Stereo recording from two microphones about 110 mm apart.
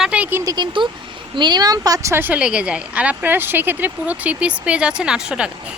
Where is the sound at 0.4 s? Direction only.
40° right (ahead or behind).